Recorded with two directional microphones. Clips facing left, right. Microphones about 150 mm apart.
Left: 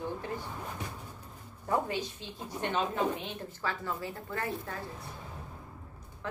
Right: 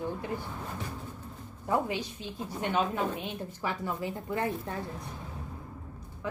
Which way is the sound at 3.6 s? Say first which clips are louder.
Right 2 dB; 15° right (ahead or behind).